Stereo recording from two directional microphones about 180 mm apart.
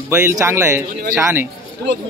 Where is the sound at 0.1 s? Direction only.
15° right (ahead or behind).